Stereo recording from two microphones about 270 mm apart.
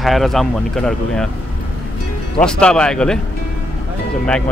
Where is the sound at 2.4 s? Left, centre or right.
Centre.